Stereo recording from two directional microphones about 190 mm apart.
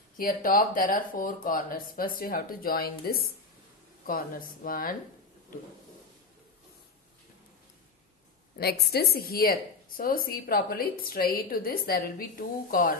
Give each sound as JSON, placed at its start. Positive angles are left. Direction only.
{"t": 0.2, "sound": "a woman's voice", "side_deg": 50}
{"t": 8.5, "sound": "a woman's voice", "side_deg": 55}